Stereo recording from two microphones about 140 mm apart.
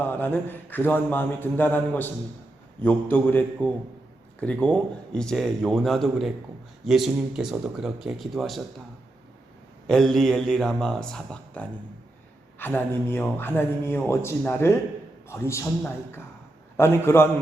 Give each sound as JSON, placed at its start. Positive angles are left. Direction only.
{"t": 0.0, "sound": "speech", "side_deg": 10}
{"t": 9.8, "sound": "speech", "side_deg": 0}